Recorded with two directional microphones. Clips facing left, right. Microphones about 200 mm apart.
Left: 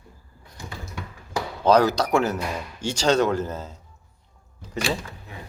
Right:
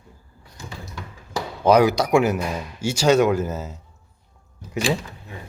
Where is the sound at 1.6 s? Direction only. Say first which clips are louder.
Right 2 dB; 10° right (ahead or behind).